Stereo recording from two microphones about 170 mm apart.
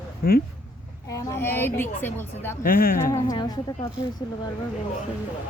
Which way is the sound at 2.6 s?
55° left (ahead or behind).